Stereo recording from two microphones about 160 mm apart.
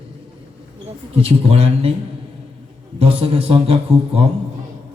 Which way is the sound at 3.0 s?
40° right (ahead or behind).